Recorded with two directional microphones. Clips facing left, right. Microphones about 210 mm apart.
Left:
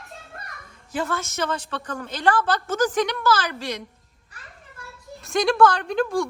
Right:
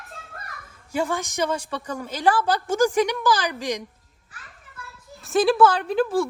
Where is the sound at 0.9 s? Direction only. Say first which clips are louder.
Right 2 dB; 10° right (ahead or behind).